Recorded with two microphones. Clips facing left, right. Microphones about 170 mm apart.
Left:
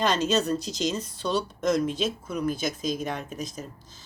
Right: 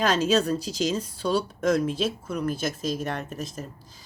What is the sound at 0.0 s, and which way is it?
Speech, 5° right (ahead or behind).